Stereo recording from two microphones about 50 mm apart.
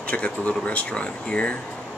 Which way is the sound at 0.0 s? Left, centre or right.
Left.